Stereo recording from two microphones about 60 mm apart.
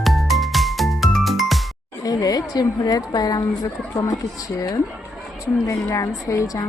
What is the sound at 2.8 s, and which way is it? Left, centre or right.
Speech, left.